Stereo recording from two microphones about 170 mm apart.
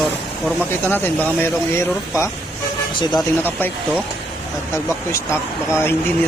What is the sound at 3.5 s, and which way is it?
Speech, 10° left (ahead or behind).